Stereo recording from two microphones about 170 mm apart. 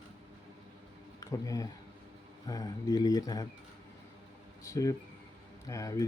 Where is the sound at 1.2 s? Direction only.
20° left (ahead or behind).